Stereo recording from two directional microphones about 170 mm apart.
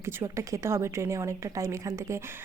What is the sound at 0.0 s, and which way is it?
A woman's voice, 15° right (ahead or behind).